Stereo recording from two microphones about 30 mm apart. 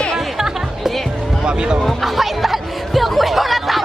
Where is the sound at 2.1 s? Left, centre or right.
Centre.